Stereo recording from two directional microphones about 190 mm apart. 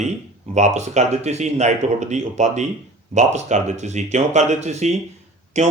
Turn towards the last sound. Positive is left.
turn(degrees=-35)  # may be behind; listen again after turning